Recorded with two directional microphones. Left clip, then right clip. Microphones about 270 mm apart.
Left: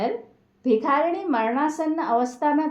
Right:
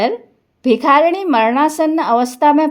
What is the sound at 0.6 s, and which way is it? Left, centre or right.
Speech, right.